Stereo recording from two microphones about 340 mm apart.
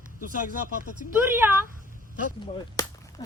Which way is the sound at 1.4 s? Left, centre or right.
Centre.